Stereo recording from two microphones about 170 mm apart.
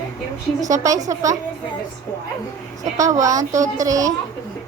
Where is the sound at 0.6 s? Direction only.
20° right (ahead or behind).